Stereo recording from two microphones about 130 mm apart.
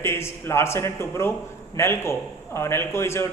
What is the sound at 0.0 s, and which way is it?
A man's voice, 20° left (ahead or behind).